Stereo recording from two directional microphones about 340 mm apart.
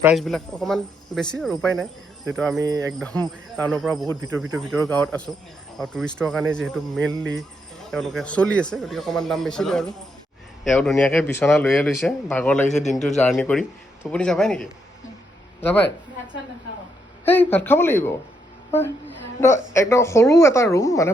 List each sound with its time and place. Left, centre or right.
0.0 s speech: centre
2.6 s speech: centre
3.5 s speech: centre
4.6 s speech: centre
12.6 s a man's voice: left
13.1 s speech: centre
17.2 s a woman's voice: centre
18.7 s a sound: centre
19.7 s a woman's voice: centre